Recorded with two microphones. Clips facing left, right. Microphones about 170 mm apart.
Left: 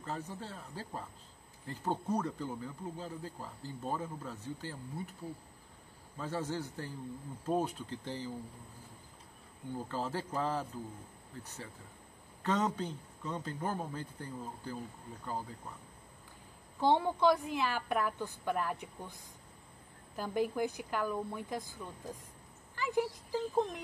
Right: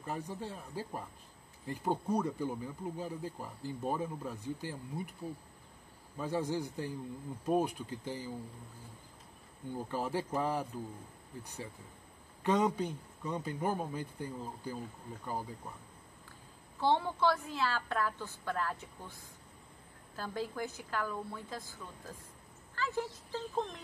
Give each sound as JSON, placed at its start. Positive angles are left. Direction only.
{"t": 0.0, "sound": "speech", "side_deg": -15}
{"t": 6.1, "sound": "speech", "side_deg": -15}
{"t": 9.8, "sound": "speech", "side_deg": -15}
{"t": 16.8, "sound": "a woman's voice", "side_deg": 15}
{"t": 20.2, "sound": "a woman's voice", "side_deg": 15}